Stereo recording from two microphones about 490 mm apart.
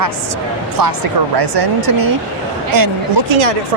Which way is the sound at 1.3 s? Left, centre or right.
Right.